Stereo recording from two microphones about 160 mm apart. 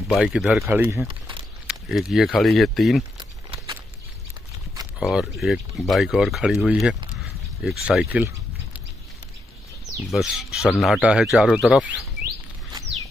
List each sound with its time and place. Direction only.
0.1 s speech: 5° right (ahead or behind)
1.0 s speech: 30° right (ahead or behind)
1.7 s speech: centre (ahead or behind)
3.2 s a sound: 30° right (ahead or behind)
4.9 s speech: centre (ahead or behind)
7.2 s a sound: centre (ahead or behind)
10.1 s speech: centre (ahead or behind)